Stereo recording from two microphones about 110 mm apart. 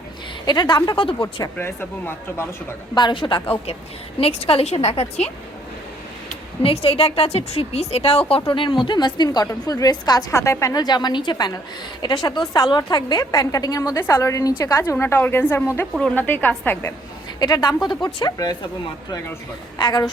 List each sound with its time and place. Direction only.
0.4 s a woman's voice: 40° left (ahead or behind)
1.0 s a woman's voice: 55° left (ahead or behind)
1.5 s a woman's voice: 20° left (ahead or behind)
2.9 s a woman's voice: 45° left (ahead or behind)
4.2 s a woman's voice: 65° left (ahead or behind)
6.6 s a woman's voice: 60° left (ahead or behind)
8.4 s a woman's voice: 50° left (ahead or behind); by 15.9 s 20° left (ahead or behind)
16.0 s a woman's voice: 10° left (ahead or behind)
17.4 s a woman's voice: 35° left (ahead or behind)
19.8 s a woman's voice: 35° left (ahead or behind)